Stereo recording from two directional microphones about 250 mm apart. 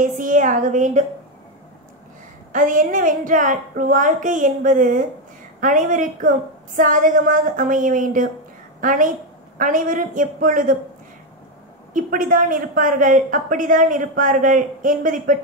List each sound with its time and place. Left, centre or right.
0.0 s a woman's voice: right
2.5 s a woman's voice: right
11.9 s a woman's voice: right